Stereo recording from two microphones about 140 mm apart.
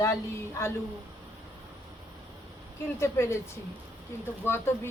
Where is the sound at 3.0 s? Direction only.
20° left (ahead or behind).